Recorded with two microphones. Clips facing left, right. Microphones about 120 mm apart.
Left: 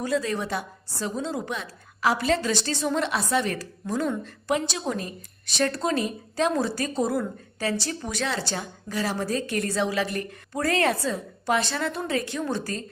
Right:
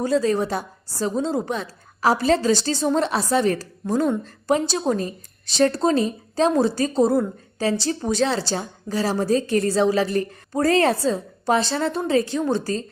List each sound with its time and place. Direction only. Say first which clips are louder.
0.0 s a woman's voice: right 6 dB; 35° right (ahead or behind)